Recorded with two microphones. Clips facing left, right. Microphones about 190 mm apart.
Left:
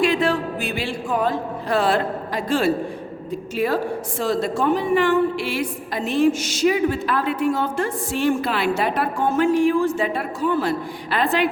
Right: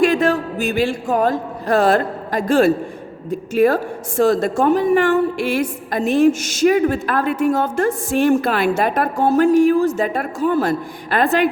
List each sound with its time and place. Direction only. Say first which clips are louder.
0.0 s a man's voice: right 4 dB; 45° right (ahead or behind)